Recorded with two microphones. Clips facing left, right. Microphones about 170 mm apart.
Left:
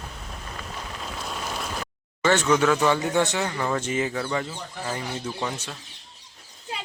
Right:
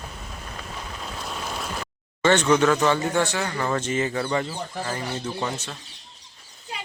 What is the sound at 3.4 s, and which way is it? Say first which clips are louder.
Speech: right 1 dB; 5° left (ahead or behind).